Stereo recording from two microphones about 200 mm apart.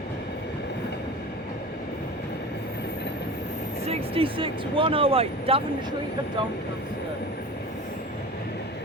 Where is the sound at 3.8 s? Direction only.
30° right (ahead or behind).